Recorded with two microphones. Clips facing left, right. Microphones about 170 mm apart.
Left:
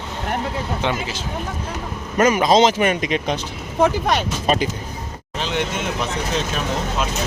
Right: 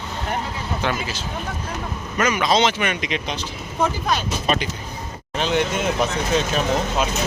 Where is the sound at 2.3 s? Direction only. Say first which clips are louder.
Left 4 dB; 40° left (ahead or behind).